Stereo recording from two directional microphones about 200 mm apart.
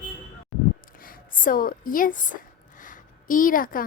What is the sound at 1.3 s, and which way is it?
A woman's voice, 45° left (ahead or behind).